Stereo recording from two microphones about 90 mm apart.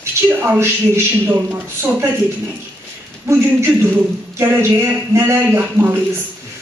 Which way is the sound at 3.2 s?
30° right (ahead or behind).